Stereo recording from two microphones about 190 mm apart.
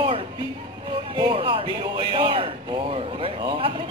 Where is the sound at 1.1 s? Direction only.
25° right (ahead or behind).